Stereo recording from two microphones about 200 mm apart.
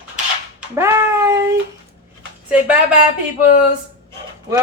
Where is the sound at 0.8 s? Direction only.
15° right (ahead or behind).